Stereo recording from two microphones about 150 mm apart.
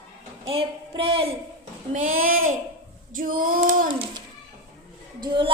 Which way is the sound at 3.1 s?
65° right (ahead or behind).